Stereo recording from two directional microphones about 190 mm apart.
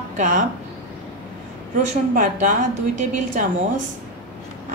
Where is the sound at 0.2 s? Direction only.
40° right (ahead or behind).